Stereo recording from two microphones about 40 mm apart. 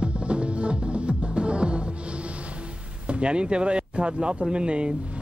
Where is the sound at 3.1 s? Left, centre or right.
Right.